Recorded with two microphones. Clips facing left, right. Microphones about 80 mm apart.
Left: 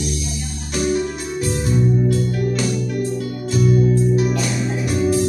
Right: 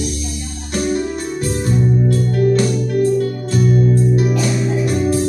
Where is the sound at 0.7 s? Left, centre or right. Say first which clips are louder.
Right 1 dB; right.